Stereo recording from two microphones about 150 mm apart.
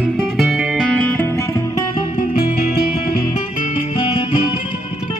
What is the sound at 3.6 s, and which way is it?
Music, 50° left (ahead or behind).